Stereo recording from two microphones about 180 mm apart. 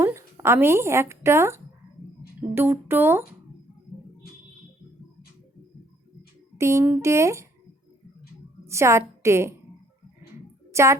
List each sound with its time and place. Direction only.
0.0 s a woman's voice: 15° right (ahead or behind)
6.6 s speech: 15° right (ahead or behind)
8.6 s a woman's voice: 15° right (ahead or behind)
10.7 s a sound: 15° right (ahead or behind)